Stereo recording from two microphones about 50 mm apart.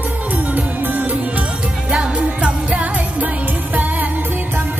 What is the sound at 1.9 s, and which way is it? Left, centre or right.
Music, right.